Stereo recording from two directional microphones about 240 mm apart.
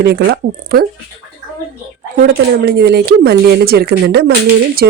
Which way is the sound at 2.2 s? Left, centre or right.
Right.